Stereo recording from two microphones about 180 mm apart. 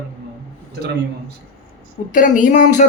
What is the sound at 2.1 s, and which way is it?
Speech, 45° left (ahead or behind).